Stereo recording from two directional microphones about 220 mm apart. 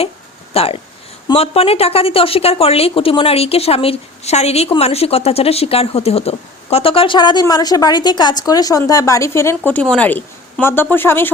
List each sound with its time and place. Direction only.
0.5 s a woman's voice: 25° left (ahead or behind); by 11.3 s 10° left (ahead or behind)